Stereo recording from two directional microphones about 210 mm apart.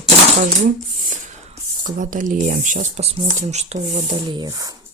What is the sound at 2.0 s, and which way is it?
Speech, 40° right (ahead or behind).